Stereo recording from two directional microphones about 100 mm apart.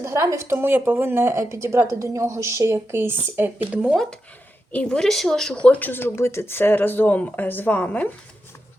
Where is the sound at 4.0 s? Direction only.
10° left (ahead or behind).